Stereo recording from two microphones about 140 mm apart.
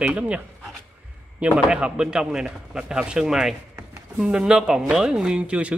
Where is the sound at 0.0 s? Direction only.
10° right (ahead or behind).